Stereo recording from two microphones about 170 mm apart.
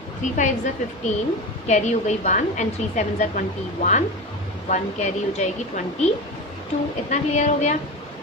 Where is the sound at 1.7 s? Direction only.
40° left (ahead or behind).